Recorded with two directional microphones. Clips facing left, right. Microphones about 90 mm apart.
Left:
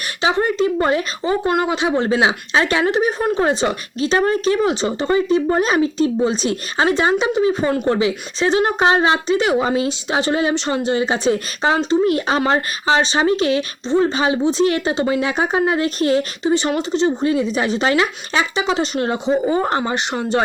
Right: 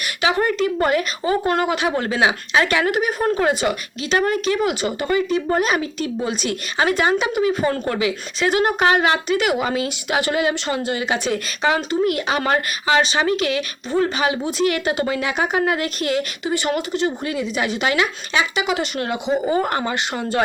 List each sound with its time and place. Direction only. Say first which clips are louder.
0.2 s speech: left 2 dB; 25° left (ahead or behind)